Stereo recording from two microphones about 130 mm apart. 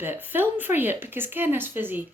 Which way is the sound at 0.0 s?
15° right (ahead or behind).